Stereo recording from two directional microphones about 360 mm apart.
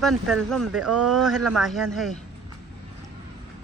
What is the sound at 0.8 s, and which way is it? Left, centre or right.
Speech, right.